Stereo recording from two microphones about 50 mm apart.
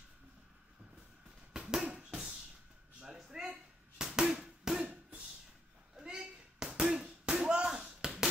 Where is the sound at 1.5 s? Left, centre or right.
Centre.